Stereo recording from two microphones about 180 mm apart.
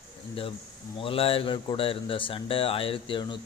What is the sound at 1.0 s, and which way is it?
Speech, 30° left (ahead or behind).